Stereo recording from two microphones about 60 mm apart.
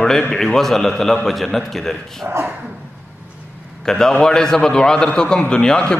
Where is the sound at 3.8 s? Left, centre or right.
Centre.